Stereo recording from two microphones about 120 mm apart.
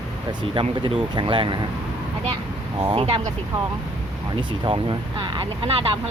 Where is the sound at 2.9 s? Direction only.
50° right (ahead or behind).